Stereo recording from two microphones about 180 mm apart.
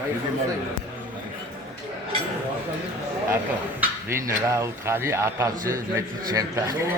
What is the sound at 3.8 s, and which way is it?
Speech, 15° right (ahead or behind).